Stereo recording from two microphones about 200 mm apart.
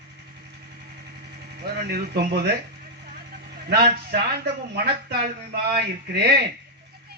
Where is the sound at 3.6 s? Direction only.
55° right (ahead or behind).